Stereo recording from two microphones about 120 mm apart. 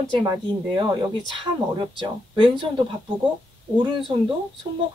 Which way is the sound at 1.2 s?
40° right (ahead or behind).